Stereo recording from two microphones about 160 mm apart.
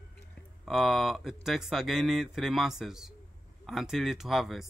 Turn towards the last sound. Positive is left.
turn(degrees=0)  # may be behind; listen again after turning